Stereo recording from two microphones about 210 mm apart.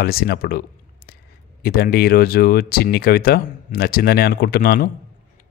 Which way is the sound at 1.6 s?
45° left (ahead or behind).